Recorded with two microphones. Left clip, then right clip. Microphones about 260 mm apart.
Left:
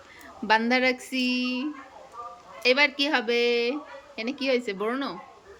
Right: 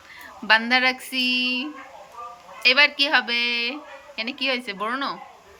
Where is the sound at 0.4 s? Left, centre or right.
Centre.